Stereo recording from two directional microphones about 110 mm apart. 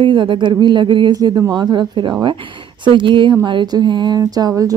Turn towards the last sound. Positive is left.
turn(degrees=-35)  # may be behind; listen again after turning